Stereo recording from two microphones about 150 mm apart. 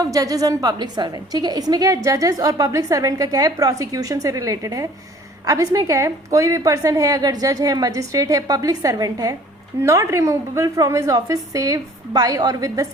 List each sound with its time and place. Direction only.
0.0 s a woman's voice: 25° right (ahead or behind)